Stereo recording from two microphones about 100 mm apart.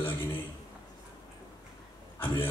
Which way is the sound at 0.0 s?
20° left (ahead or behind).